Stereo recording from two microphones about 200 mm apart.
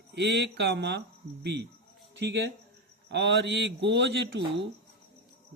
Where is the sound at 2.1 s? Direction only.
60° right (ahead or behind).